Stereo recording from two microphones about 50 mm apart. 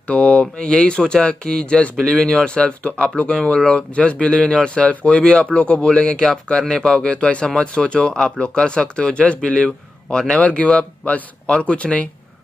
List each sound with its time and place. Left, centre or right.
0.0 s speech: left
10.4 s speech: left